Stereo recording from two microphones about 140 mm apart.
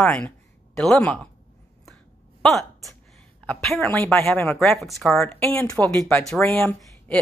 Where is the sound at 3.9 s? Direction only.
15° left (ahead or behind).